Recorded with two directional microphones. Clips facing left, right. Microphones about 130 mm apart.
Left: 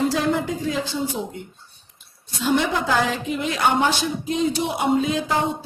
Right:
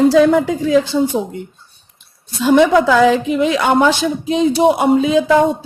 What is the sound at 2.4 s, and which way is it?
Speech, 90° right.